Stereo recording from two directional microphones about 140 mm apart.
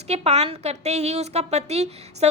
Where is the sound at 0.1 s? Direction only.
50° right (ahead or behind).